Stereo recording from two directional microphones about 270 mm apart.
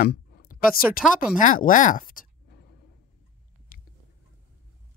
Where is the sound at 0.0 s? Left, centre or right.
Left.